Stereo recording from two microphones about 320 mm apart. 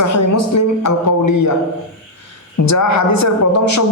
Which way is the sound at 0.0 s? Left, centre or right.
Left.